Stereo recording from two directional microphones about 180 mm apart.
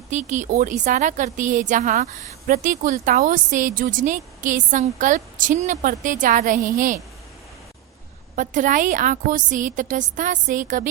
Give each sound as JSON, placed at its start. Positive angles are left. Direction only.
{"t": 0.1, "sound": "a woman's voice", "side_deg": -45}
{"t": 8.4, "sound": "a woman's voice", "side_deg": -45}